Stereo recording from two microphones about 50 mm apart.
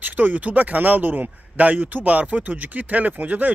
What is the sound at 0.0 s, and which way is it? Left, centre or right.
Speech, right.